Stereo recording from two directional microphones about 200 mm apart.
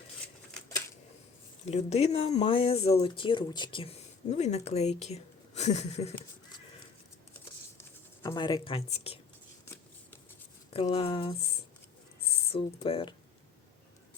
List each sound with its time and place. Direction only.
1.7 s speech: 30° left (ahead or behind)
7.3 s writing: 15° left (ahead or behind); by 9.1 s 30° left (ahead or behind)
10.8 s speech: 30° left (ahead or behind)
12.5 s speech: 25° left (ahead or behind)